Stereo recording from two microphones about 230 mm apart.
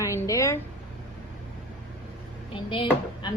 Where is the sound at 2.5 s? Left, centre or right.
Left.